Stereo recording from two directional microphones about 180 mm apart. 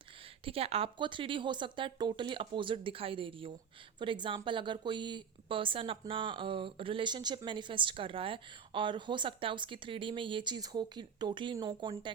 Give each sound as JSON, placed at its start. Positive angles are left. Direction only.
{"t": 0.4, "sound": "speech", "side_deg": -35}